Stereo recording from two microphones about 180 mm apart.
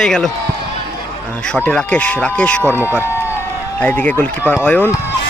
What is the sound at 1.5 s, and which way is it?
A man's voice, 5° left (ahead or behind).